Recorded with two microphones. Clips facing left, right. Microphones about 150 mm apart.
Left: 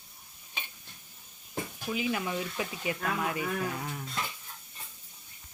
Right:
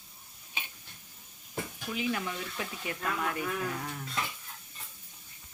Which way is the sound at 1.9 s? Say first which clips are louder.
Left 2 dB; 5° left (ahead or behind).